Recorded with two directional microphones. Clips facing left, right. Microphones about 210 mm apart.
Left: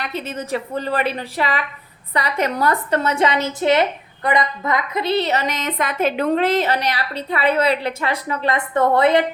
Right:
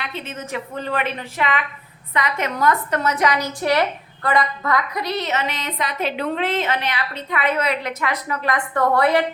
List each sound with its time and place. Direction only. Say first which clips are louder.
0.0 s a woman's voice: left 4 dB; 40° left (ahead or behind); by 9.2 s 20° left (ahead or behind)